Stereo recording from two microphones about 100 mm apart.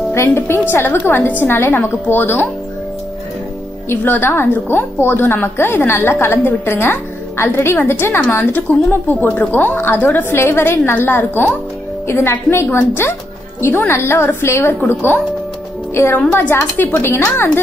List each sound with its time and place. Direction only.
0.1 s a woman's voice: 25° left (ahead or behind)
3.9 s a woman's voice: 20° left (ahead or behind)